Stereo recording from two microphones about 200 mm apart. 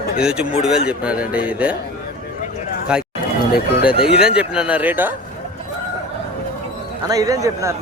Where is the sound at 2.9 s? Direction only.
5° right (ahead or behind).